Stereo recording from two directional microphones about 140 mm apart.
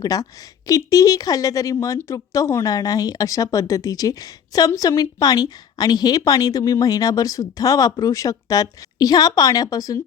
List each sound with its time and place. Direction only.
0.0 s speech: 25° left (ahead or behind)